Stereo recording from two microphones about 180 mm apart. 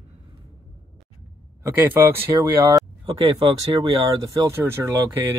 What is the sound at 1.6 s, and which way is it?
Speech, 10° right (ahead or behind).